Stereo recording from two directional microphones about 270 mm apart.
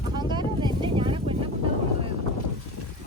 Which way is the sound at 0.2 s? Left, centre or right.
Centre.